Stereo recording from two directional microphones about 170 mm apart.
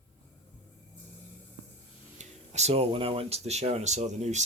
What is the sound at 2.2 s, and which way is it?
Speech, 40° right (ahead or behind).